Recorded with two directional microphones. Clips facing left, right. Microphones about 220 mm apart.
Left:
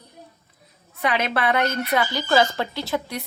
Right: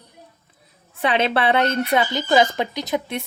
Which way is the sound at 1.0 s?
30° right (ahead or behind).